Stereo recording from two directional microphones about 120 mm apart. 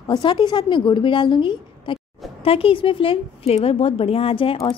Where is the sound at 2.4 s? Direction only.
50° left (ahead or behind).